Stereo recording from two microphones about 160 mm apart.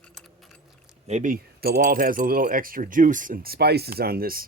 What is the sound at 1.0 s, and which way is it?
Speech, 50° right (ahead or behind).